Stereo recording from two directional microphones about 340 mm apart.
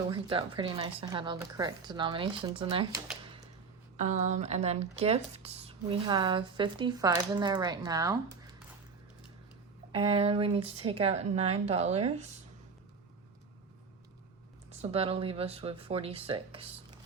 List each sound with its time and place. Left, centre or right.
0.1 s speech: centre
9.9 s speech: centre
14.7 s speech: centre